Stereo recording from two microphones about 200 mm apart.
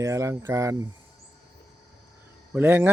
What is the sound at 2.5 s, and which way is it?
Speech, 10° right (ahead or behind).